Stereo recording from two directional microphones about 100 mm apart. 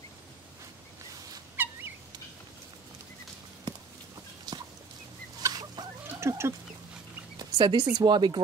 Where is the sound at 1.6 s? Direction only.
20° right (ahead or behind).